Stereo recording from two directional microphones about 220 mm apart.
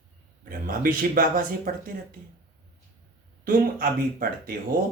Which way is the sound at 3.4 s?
40° right (ahead or behind).